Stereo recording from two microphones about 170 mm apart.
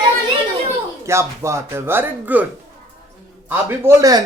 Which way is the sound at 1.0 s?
15° right (ahead or behind).